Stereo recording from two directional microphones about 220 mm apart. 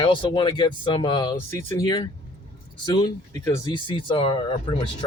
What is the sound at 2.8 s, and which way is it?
Speech, 20° left (ahead or behind).